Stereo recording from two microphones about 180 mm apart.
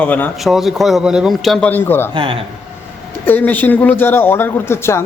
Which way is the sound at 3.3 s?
10° left (ahead or behind).